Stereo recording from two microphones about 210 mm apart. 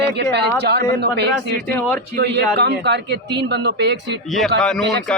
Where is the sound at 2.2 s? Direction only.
55° right (ahead or behind).